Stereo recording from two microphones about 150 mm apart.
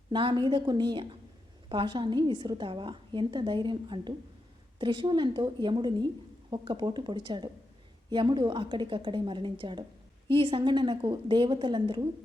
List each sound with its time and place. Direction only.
0.1 s a woman's voice: 35° right (ahead or behind)